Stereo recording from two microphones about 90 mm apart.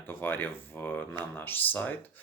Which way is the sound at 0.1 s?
20° left (ahead or behind).